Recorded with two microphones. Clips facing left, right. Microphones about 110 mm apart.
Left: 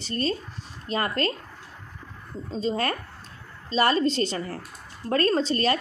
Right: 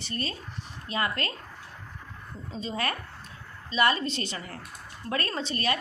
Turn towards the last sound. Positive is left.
turn(degrees=35)  # may be behind; listen again after turning